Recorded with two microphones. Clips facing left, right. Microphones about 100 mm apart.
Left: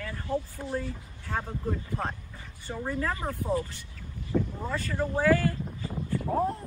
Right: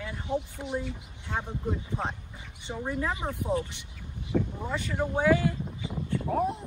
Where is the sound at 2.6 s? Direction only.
15° right (ahead or behind).